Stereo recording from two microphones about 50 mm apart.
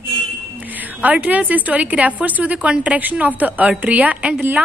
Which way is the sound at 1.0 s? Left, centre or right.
Right.